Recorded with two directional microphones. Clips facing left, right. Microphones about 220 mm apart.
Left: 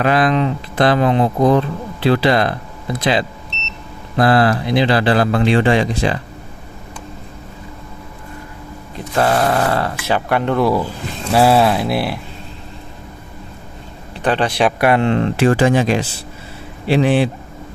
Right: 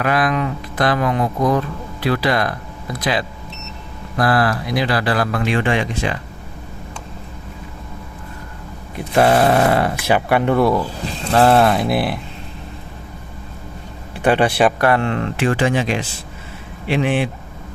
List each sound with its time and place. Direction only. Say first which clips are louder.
0.0 s speech: left 3 dB; 25° left (ahead or behind)
9.1 s speech: right 2 dB; 20° right (ahead or behind); by 12.2 s centre (ahead or behind)
14.2 s speech: right 2 dB; 10° right (ahead or behind)
14.8 s speech: left 3 dB; 15° left (ahead or behind)
15.4 s speech: left 4 dB; 40° left (ahead or behind)